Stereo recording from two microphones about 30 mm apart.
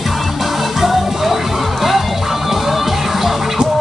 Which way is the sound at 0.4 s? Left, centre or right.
Centre.